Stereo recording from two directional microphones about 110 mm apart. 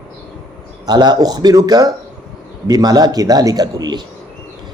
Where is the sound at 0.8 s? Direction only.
40° right (ahead or behind).